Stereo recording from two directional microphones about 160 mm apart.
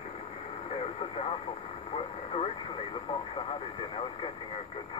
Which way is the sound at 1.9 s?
35° left (ahead or behind).